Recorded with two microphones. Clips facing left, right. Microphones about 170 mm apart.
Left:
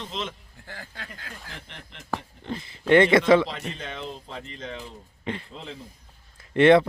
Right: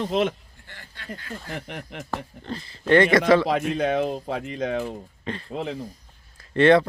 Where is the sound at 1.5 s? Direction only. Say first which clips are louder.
Right 10 dB; 55° right (ahead or behind).